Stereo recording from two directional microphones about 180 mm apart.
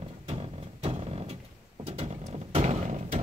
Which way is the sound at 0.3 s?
35° right (ahead or behind).